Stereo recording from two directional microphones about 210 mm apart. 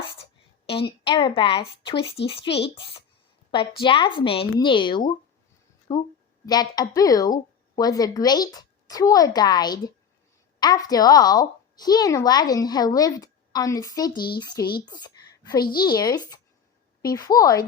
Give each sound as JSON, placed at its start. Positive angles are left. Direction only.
{"t": 1.0, "sound": "a woman's voice", "side_deg": 25}